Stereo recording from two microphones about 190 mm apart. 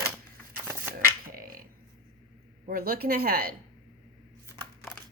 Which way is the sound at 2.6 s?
50° right (ahead or behind).